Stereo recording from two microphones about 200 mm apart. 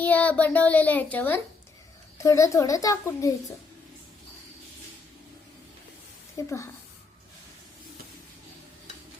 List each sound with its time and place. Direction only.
0.0 s a child's voice: 10° left (ahead or behind)
6.3 s a child's voice: 15° left (ahead or behind)